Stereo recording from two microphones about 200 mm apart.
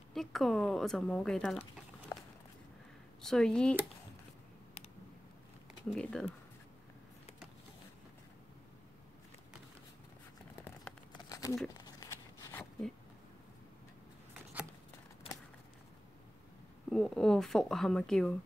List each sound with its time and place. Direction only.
0.1 s speech: centre (ahead or behind)
2.1 s walk: 15° left (ahead or behind)
3.2 s speech: 5° left (ahead or behind)
5.9 s speech: 5° left (ahead or behind)
10.6 s a sound: 5° left (ahead or behind)
11.1 s a sound: 20° left (ahead or behind)
16.9 s speech: centre (ahead or behind)